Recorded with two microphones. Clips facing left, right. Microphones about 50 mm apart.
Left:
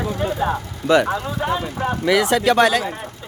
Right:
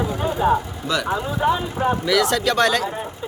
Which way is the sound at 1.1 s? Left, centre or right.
Centre.